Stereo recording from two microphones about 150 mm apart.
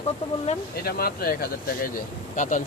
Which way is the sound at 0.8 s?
90° left.